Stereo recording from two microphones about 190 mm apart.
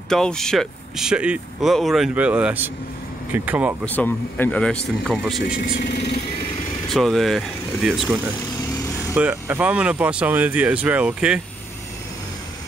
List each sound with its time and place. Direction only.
0.1 s speech: 5° left (ahead or behind)
3.8 s speech: 10° left (ahead or behind)
5.6 s speech: 60° left (ahead or behind)
6.9 s speech: centre (ahead or behind)